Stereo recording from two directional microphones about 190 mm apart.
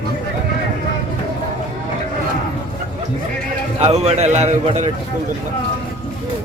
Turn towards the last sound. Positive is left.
turn(degrees=-35)  # may be behind; listen again after turning